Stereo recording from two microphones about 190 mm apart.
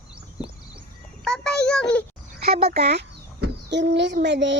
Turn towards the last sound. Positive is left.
turn(degrees=-70)  # may be behind; listen again after turning